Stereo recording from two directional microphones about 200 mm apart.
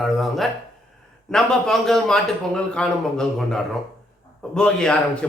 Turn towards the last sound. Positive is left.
turn(degrees=5)  # may be behind; listen again after turning